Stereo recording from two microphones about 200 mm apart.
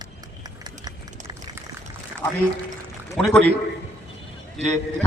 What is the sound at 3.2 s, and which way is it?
Speech, 5° left (ahead or behind).